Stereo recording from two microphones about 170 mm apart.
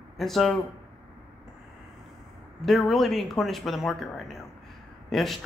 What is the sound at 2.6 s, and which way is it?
Speech, centre (ahead or behind).